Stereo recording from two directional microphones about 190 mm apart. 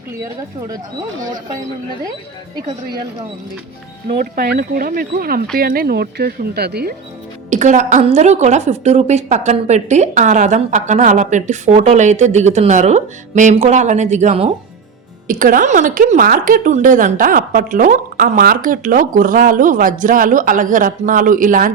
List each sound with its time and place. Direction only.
4.1 s a woman's voice: 50° right (ahead or behind)
7.5 s a woman's voice: 40° right (ahead or behind)
15.3 s a woman's voice: 45° right (ahead or behind)